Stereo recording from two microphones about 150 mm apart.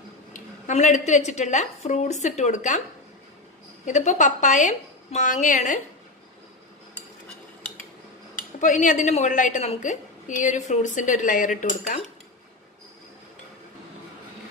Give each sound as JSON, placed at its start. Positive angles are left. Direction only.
{"t": 0.3, "sound": "a woman's voice", "side_deg": 50}
{"t": 3.8, "sound": "speech", "side_deg": 55}
{"t": 8.4, "sound": "speech", "side_deg": 55}